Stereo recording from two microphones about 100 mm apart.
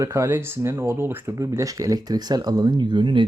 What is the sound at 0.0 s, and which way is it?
Speech, 30° right (ahead or behind).